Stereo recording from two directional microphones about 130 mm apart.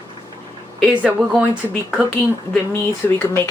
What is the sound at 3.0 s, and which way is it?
Speech, 15° left (ahead or behind).